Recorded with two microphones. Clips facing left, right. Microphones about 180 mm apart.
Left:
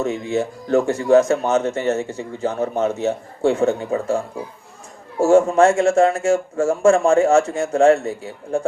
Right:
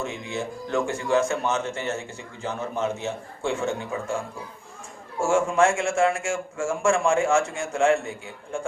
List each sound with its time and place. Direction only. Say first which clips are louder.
0.0 s speech: left 9 dB; 40° left (ahead or behind)
5.2 s speech: left 7 dB; 40° left (ahead or behind)